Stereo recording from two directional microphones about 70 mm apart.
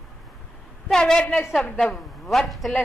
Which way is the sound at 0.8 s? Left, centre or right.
Centre.